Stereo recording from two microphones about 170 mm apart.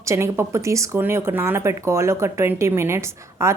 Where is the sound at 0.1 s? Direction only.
15° right (ahead or behind).